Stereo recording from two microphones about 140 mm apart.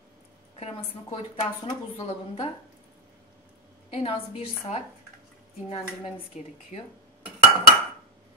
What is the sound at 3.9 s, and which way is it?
Speech, 45° left (ahead or behind).